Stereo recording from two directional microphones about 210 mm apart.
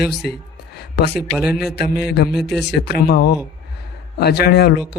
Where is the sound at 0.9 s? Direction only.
50° left (ahead or behind).